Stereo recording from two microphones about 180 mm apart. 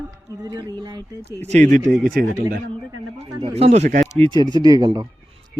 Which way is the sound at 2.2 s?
60° right (ahead or behind).